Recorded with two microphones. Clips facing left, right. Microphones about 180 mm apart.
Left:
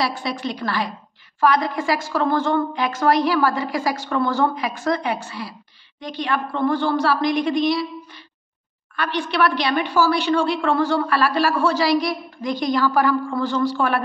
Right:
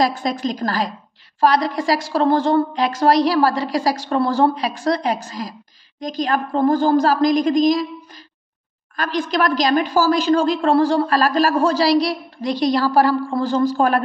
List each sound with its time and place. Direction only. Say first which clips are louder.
0.0 s a woman's voice: right 5 dB; 45° right (ahead or behind)
9.3 s a woman's voice: right 3 dB; 40° right (ahead or behind)